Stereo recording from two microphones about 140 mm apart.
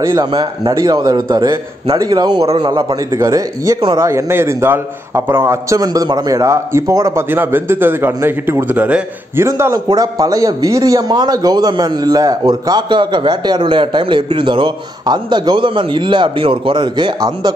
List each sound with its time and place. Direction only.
0.0 s a man's voice: 25° right (ahead or behind)
2.4 s a man's voice: 45° right (ahead or behind)
3.1 s a man's voice: 25° right (ahead or behind)
9.5 s a man's voice: 25° right (ahead or behind)